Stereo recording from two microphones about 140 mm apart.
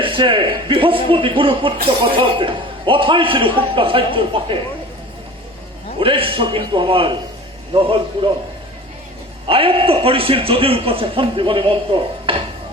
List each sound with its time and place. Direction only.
0.0 s a man's voice: 40° right (ahead or behind)
6.0 s a man's voice: 40° right (ahead or behind)
9.5 s a man's voice: 40° right (ahead or behind)